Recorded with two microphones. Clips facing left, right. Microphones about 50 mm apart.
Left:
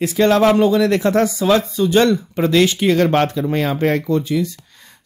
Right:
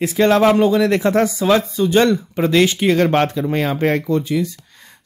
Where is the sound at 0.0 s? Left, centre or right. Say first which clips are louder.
Even; centre.